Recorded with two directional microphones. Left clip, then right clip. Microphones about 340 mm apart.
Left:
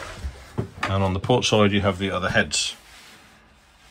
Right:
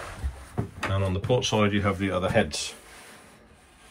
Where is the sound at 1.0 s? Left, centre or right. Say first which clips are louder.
Left 4 dB; centre.